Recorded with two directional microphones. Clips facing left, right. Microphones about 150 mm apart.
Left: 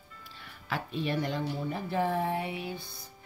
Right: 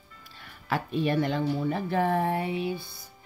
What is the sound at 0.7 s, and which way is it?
Speech, 50° right (ahead or behind).